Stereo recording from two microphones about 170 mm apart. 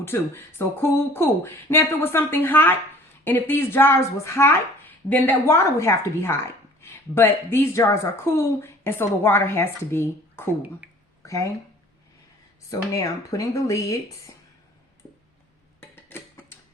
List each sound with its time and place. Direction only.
0.0 s a woman's voice: 15° left (ahead or behind)
12.7 s speech: 20° left (ahead or behind)
15.8 s tick-tock: 10° left (ahead or behind)